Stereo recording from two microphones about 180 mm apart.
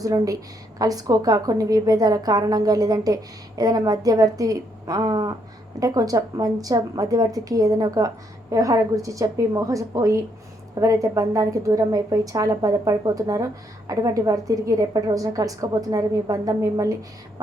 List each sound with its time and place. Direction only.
0.0 s a woman's voice: 20° right (ahead or behind)